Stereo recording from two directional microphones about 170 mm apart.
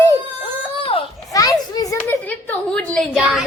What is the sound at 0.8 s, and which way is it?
Children playing, 35° left (ahead or behind).